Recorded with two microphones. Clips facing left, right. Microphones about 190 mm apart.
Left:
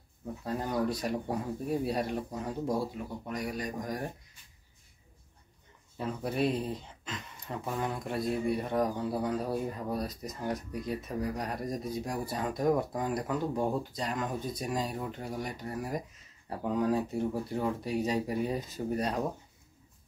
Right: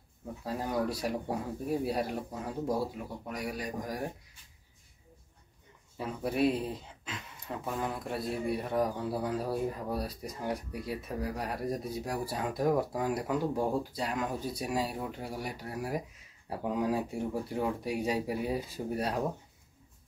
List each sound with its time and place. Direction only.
0.5 s speech: 5° right (ahead or behind)
5.9 s speech: 5° right (ahead or behind)